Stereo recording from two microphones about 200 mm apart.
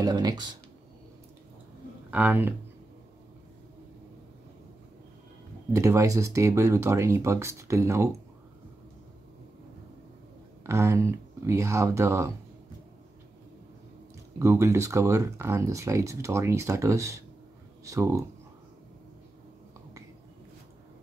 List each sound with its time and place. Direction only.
0.0 s speech: 20° right (ahead or behind)
2.0 s speech: 10° right (ahead or behind)
5.7 s speech: 15° right (ahead or behind)
10.6 s speech: 15° right (ahead or behind)
14.4 s speech: 15° right (ahead or behind)